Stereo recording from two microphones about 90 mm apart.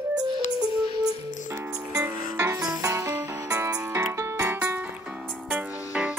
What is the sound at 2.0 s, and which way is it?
Music, 30° right (ahead or behind).